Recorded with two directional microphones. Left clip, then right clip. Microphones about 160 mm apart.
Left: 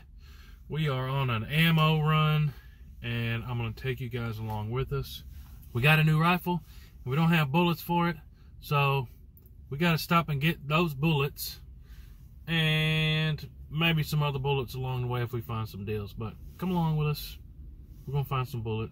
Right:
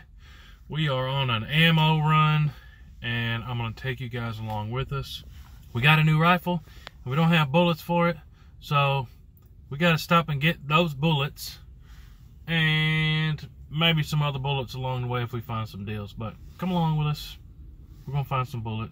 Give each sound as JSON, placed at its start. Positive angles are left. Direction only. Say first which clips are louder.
{"t": 0.7, "sound": "speech", "louder": "right 5 dB", "side_deg": -20}
{"t": 12.5, "sound": "speech", "louder": "right 4 dB", "side_deg": -10}